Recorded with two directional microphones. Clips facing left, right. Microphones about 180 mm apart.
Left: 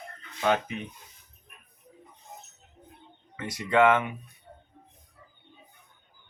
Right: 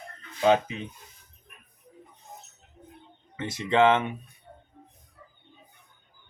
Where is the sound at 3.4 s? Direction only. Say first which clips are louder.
Right 1 dB; 25° right (ahead or behind).